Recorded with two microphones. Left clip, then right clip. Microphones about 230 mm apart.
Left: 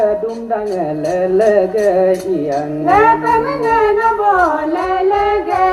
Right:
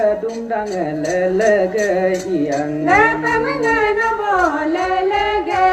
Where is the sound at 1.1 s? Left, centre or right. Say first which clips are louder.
Left 3 dB; left.